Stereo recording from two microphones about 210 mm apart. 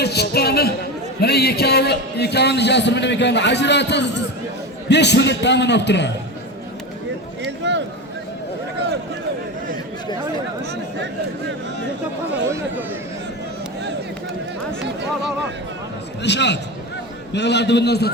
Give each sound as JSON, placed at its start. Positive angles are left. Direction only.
{"t": 0.0, "sound": "a man's voice", "side_deg": 50}
{"t": 7.6, "sound": "a sound", "side_deg": -55}
{"t": 16.2, "sound": "a man's voice", "side_deg": 55}